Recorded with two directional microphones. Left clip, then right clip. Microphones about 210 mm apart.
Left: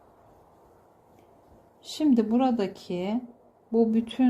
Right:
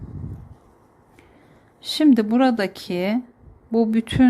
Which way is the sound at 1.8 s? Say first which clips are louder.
Right 7 dB; 20° right (ahead or behind).